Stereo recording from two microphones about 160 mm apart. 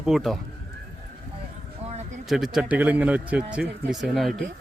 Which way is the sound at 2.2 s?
Centre (ahead or behind).